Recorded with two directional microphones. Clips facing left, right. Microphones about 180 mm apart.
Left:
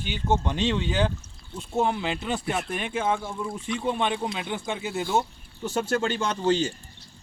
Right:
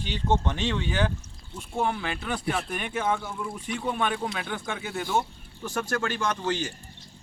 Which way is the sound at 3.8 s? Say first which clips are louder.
Left 1 dB; 20° left (ahead or behind).